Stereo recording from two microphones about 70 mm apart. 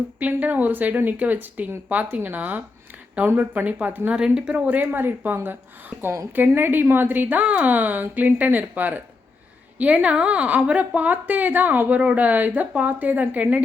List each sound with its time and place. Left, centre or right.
0.2 s a woman's voice: right
4.1 s speech: centre
4.5 s a woman's voice: right